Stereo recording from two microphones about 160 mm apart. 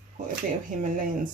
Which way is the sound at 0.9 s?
55° right (ahead or behind).